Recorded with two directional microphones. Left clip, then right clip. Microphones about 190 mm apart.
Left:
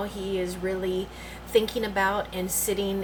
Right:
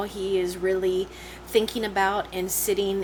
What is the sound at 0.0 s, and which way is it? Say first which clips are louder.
Speech: right 4 dB; 50° right (ahead or behind).